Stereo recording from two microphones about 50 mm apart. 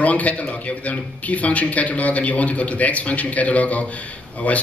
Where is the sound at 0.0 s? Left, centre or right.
Left.